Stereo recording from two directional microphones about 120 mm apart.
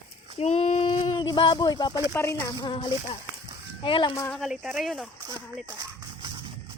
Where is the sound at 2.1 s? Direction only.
25° left (ahead or behind).